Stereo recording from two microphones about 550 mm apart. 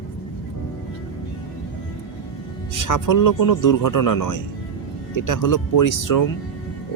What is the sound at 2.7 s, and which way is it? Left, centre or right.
Speech, left.